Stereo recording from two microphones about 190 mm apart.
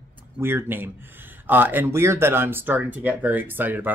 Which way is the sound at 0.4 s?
10° right (ahead or behind).